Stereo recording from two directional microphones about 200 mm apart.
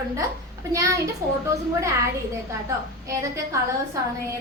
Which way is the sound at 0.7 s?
15° right (ahead or behind).